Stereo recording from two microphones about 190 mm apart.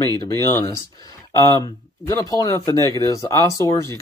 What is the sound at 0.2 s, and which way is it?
Speech, 15° left (ahead or behind).